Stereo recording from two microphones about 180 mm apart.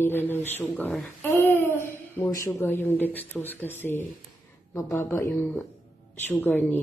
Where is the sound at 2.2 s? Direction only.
15° left (ahead or behind).